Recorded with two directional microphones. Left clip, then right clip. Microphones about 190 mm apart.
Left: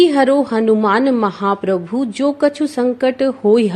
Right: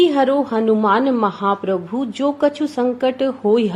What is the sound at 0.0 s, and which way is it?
A woman's voice, 40° left (ahead or behind).